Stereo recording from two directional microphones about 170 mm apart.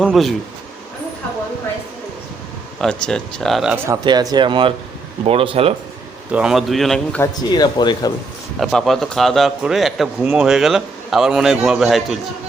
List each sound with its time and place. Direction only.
0.0 s a man's voice: centre (ahead or behind)
2.8 s a man's voice: 5° left (ahead or behind)
3.8 s speech: 20° right (ahead or behind)
6.3 s a man's voice: 5° right (ahead or behind)
7.2 s speech: 25° left (ahead or behind)
8.5 s a man's voice: centre (ahead or behind)